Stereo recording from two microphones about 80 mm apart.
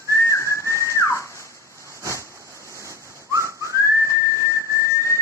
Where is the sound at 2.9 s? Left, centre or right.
Right.